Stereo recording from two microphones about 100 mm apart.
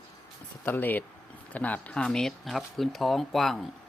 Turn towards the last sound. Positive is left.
turn(degrees=0)  # may be behind; listen again after turning